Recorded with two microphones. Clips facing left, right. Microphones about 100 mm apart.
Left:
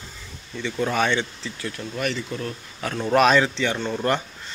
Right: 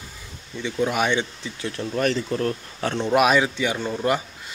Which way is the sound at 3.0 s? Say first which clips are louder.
Left 1 dB; 10° right (ahead or behind).